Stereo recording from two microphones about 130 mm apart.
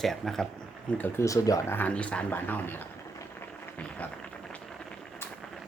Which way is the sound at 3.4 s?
10° left (ahead or behind).